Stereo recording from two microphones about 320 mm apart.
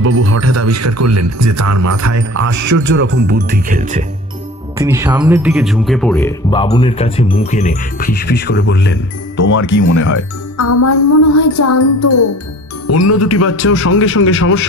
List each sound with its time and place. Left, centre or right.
0.1 s speech: right
2.7 s speech: right
4.7 s speech: centre; by 8.9 s left
9.7 s a man's voice: left